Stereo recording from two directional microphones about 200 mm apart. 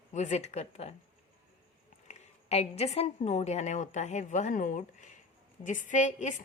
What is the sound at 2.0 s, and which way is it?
A woman's voice, 30° left (ahead or behind).